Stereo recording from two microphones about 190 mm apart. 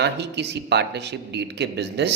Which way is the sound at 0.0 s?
65° right (ahead or behind).